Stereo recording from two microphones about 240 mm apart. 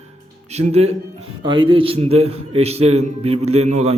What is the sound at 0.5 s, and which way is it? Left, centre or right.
A man's voice, right.